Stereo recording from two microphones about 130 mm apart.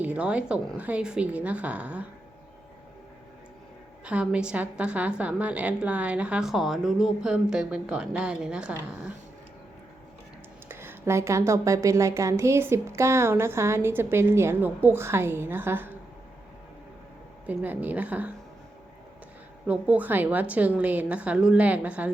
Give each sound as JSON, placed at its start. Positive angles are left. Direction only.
{"t": 0.0, "sound": "a woman's voice", "side_deg": -10}
{"t": 4.0, "sound": "a woman's voice", "side_deg": -10}
{"t": 10.7, "sound": "speech", "side_deg": -20}
{"t": 17.4, "sound": "a woman's voice", "side_deg": -15}
{"t": 19.6, "sound": "a woman's voice", "side_deg": -10}